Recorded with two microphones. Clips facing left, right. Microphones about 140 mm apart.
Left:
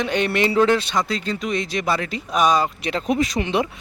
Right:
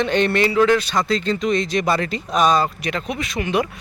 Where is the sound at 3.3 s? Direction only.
20° left (ahead or behind).